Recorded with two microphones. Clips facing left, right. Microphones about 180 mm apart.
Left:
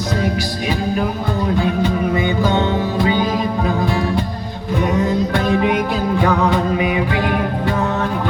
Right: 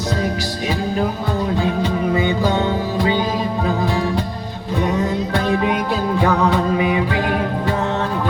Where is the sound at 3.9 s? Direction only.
35° right (ahead or behind).